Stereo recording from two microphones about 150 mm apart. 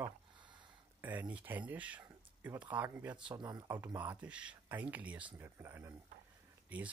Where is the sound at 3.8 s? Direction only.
10° right (ahead or behind).